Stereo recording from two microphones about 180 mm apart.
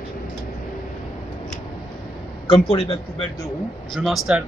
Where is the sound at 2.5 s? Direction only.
30° left (ahead or behind).